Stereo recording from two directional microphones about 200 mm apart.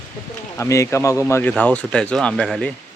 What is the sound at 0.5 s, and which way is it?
Speech, 15° left (ahead or behind).